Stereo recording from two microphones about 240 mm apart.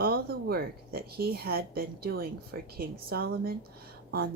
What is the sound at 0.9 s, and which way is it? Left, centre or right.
Speech, right.